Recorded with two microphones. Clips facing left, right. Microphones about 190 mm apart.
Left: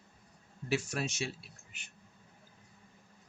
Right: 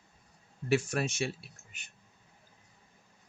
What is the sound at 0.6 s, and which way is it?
Speech, 55° right (ahead or behind).